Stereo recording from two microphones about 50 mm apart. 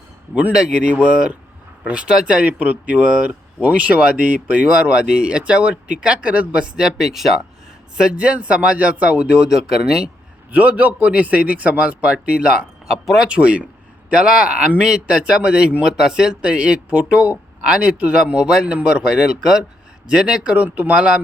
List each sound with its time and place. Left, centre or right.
0.5 s speech: right
10.5 s speech: right; by 13.2 s centre
13.2 s speech: right